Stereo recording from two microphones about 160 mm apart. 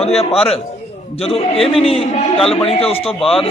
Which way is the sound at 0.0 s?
40° left (ahead or behind).